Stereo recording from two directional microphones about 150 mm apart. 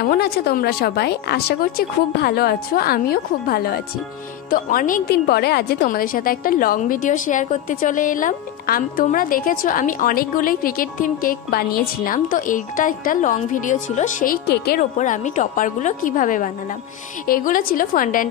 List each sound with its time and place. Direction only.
0.1 s speech: 90° left
4.5 s a woman's voice: 70° left (ahead or behind)
14.8 s a woman's voice: 55° left (ahead or behind)